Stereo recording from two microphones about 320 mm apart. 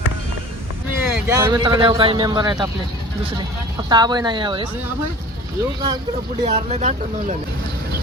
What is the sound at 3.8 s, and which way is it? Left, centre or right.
Speech, centre.